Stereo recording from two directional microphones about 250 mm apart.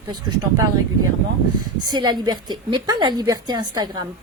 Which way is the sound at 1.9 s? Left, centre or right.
Centre.